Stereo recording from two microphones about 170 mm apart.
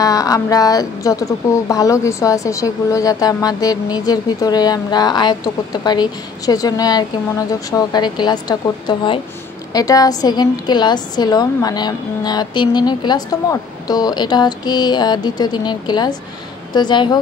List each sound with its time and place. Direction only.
0.0 s speech: 20° left (ahead or behind)